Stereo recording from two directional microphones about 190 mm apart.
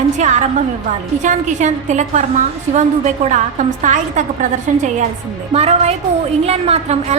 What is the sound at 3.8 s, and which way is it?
A woman's voice, 40° right (ahead or behind).